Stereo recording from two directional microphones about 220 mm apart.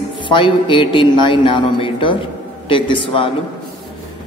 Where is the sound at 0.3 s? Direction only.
20° left (ahead or behind).